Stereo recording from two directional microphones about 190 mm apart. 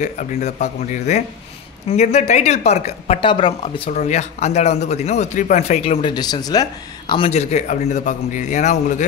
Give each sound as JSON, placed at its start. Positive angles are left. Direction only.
{"t": 0.0, "sound": "speech", "side_deg": 40}